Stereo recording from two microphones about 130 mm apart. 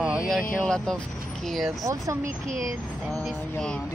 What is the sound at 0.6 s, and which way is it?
Speech, 5° left (ahead or behind).